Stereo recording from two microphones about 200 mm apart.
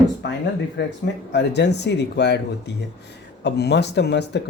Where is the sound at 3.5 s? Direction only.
55° left (ahead or behind).